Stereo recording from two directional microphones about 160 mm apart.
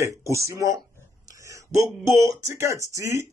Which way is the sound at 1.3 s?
20° right (ahead or behind).